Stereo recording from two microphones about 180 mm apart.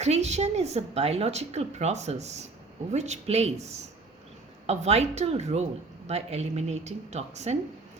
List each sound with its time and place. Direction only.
0.0 s a woman's voice: 40° right (ahead or behind)